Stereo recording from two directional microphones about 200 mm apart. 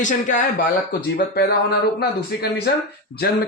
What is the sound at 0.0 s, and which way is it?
Speech, 40° left (ahead or behind).